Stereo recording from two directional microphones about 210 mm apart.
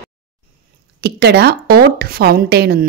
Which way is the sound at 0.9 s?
50° right (ahead or behind).